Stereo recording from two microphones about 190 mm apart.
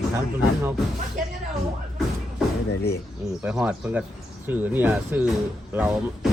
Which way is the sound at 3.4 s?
5° right (ahead or behind).